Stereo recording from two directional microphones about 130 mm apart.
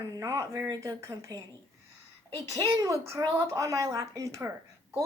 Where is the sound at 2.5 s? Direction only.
25° right (ahead or behind).